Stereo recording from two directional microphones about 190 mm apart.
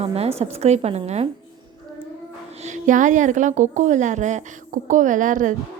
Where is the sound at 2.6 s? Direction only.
40° right (ahead or behind).